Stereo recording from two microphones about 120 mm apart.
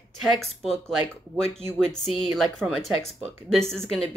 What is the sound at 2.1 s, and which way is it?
Speech, centre (ahead or behind).